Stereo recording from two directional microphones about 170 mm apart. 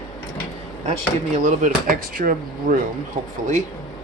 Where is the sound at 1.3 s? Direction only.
50° right (ahead or behind).